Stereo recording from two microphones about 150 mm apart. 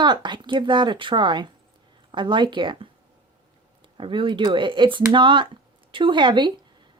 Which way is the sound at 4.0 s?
35° right (ahead or behind).